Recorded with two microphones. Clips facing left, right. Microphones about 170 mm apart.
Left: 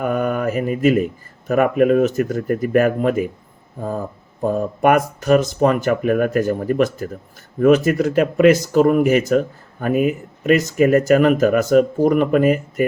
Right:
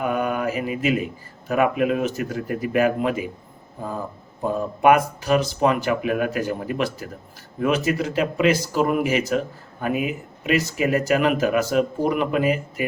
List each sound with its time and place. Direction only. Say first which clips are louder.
0.0 s mantra: left 3 dB; 45° left (ahead or behind)
1.5 s speech: left 5 dB; 50° left (ahead or behind)
4.4 s speech: left 1 dB; 50° left (ahead or behind)